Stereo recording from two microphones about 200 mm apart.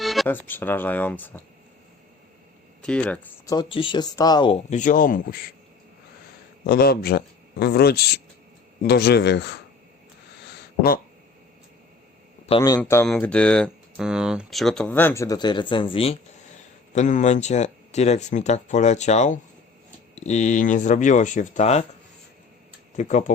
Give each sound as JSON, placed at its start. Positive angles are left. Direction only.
{"t": 0.0, "sound": "speech", "side_deg": 0}
{"t": 2.8, "sound": "speech", "side_deg": 5}
{"t": 3.4, "sound": "speech", "side_deg": 20}
{"t": 4.7, "sound": "speech", "side_deg": 40}
{"t": 6.7, "sound": "speech", "side_deg": 50}
{"t": 10.4, "sound": "a sound", "side_deg": 50}
{"t": 12.5, "sound": "speech", "side_deg": 20}
{"t": 12.8, "sound": "speech", "side_deg": 10}
{"t": 23.0, "sound": "speech", "side_deg": 40}